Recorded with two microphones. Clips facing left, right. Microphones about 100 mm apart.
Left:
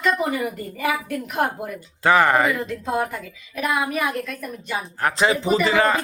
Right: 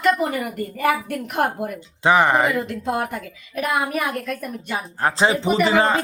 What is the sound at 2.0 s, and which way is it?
Speech, 20° right (ahead or behind).